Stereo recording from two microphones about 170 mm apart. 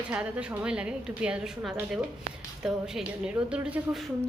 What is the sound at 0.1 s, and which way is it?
A woman's voice, 5° right (ahead or behind).